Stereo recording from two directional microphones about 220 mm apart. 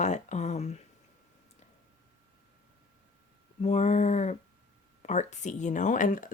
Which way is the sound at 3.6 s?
30° left (ahead or behind).